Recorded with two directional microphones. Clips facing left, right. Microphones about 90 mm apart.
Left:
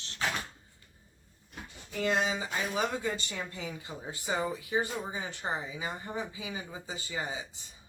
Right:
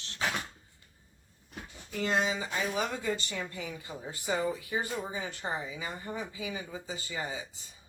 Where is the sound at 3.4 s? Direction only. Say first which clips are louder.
Even; 25° left (ahead or behind).